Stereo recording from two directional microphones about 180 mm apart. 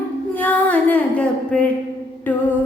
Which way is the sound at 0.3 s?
10° left (ahead or behind).